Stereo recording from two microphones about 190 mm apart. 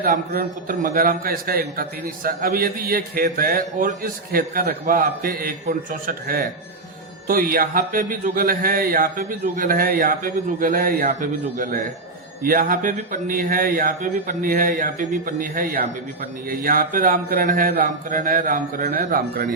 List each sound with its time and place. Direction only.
0.0 s a man's voice: 45° right (ahead or behind)